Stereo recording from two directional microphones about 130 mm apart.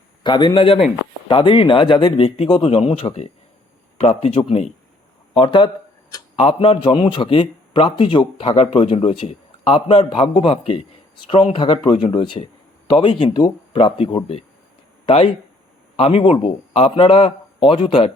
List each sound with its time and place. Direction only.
0.2 s a man's voice: 35° left (ahead or behind); by 4.7 s 55° left (ahead or behind)
5.3 s a sound: 40° left (ahead or behind)
6.3 s a man's voice: 45° left (ahead or behind)